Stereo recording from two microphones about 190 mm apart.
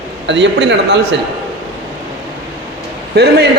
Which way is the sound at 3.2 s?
60° right (ahead or behind).